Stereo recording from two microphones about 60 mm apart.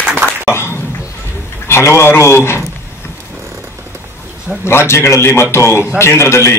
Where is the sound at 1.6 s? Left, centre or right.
Left.